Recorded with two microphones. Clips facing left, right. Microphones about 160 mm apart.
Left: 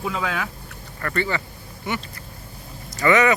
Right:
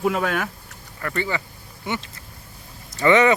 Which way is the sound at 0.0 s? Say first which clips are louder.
Right 4 dB; 50° right (ahead or behind).